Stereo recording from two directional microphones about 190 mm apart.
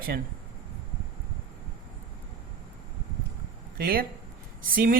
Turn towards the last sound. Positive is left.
turn(degrees=-50)  # may be behind; listen again after turning